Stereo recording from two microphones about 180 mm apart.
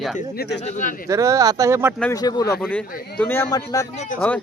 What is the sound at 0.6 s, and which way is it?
Speech, 40° left (ahead or behind).